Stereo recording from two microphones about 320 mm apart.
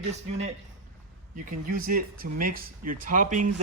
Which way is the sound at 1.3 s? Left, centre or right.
Right.